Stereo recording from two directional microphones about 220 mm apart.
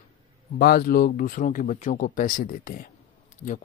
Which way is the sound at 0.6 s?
45° left (ahead or behind).